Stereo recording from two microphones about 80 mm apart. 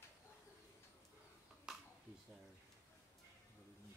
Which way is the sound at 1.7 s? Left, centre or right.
Centre.